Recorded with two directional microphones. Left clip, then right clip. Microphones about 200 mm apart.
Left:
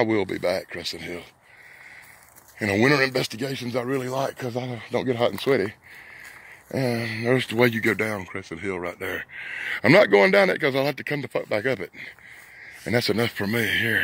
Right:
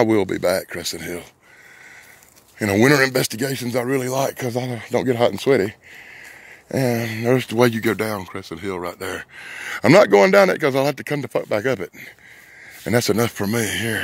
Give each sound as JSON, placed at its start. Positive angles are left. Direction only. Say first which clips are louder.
{"t": 0.0, "sound": "speech", "louder": "right 5 dB", "side_deg": -40}
{"t": 2.6, "sound": "speech", "louder": "right 4 dB", "side_deg": -35}